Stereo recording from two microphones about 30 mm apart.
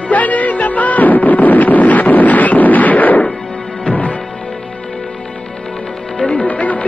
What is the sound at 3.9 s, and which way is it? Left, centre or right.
Music, left.